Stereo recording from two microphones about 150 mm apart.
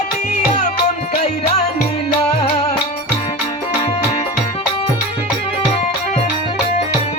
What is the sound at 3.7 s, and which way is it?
Music, 40° left (ahead or behind).